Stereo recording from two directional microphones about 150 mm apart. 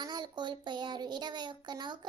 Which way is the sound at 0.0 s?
30° right (ahead or behind).